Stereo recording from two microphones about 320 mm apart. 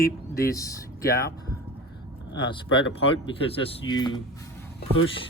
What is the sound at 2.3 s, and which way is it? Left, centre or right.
Speech, centre.